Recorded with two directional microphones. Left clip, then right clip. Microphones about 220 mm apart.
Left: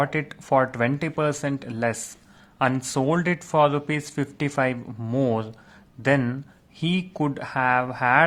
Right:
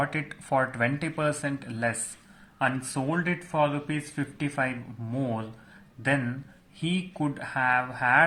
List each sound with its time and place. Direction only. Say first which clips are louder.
0.0 s speech: left 4 dB; 35° left (ahead or behind)